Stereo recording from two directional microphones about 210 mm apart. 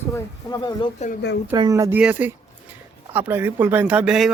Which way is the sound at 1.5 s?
20° right (ahead or behind).